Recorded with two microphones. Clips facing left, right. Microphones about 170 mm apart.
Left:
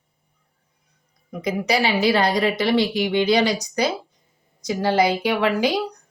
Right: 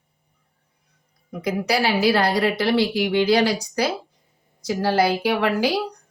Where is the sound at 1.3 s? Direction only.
15° left (ahead or behind).